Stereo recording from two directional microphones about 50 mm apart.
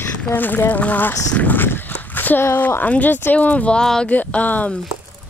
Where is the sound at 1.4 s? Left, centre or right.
Left.